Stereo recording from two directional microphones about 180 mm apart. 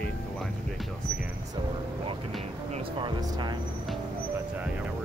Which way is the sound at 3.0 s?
25° right (ahead or behind).